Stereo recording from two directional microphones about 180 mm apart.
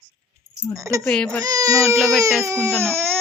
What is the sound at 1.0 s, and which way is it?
Speech, 5° left (ahead or behind).